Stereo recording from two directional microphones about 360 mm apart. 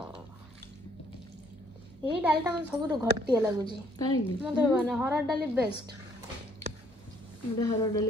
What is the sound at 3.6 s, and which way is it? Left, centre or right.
Speech, centre.